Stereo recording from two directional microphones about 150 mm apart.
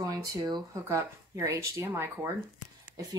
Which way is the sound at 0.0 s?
25° right (ahead or behind).